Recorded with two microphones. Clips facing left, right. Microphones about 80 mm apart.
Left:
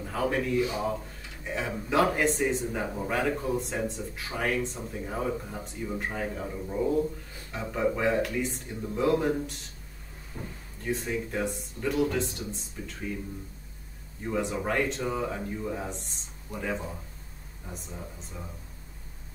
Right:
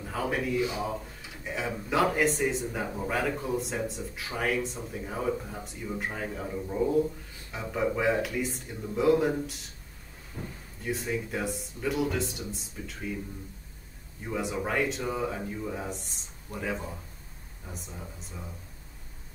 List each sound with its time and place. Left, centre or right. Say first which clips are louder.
0.0 s a man's voice: left 2 dB; centre
14.2 s a man's voice: left 2 dB; centre